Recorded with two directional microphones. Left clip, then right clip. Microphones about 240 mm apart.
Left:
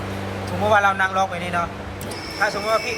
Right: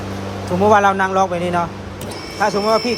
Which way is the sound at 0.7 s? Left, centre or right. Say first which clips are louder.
Right 3 dB; right.